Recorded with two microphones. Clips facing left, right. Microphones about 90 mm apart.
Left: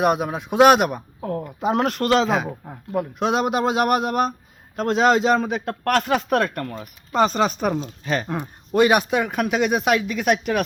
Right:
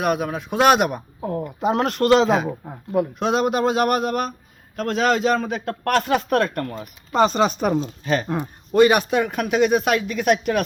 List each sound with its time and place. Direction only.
0.0 s speech: 15° left (ahead or behind); by 3.1 s 5° right (ahead or behind)
3.2 s a man's voice: 10° left (ahead or behind)
5.8 s speech: 5° left (ahead or behind)
8.7 s speech: 10° left (ahead or behind)